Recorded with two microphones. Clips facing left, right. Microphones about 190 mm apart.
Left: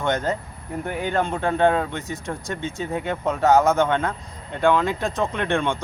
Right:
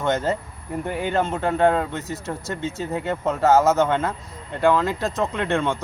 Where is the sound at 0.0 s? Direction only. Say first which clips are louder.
Right 1 dB; 5° right (ahead or behind).